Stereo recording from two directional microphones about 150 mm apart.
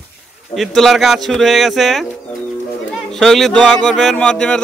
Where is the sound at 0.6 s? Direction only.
Centre (ahead or behind).